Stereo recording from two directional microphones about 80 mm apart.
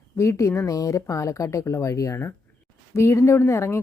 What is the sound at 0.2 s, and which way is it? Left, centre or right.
Speech, left.